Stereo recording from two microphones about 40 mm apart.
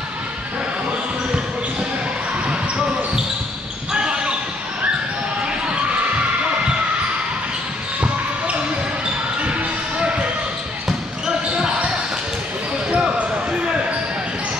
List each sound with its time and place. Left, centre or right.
3.9 s basketball bounce: right
9.4 s basketball bounce: right
11.5 s basketball bounce: right
12.9 s basketball bounce: right